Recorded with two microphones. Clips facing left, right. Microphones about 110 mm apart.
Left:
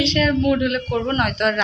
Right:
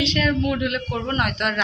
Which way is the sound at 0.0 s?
5° right (ahead or behind).